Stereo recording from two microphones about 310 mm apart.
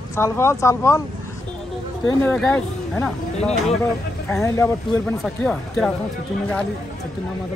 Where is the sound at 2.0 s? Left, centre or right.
Centre.